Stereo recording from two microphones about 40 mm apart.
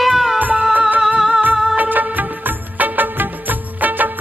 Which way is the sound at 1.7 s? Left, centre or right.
Right.